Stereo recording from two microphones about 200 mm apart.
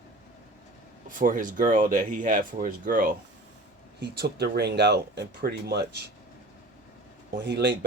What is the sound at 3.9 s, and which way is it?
Speech, 55° right (ahead or behind).